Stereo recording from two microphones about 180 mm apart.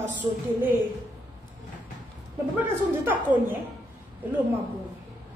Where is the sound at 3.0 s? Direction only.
10° right (ahead or behind).